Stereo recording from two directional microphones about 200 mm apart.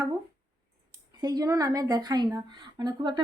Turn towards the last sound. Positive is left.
turn(degrees=-20)  # may be behind; listen again after turning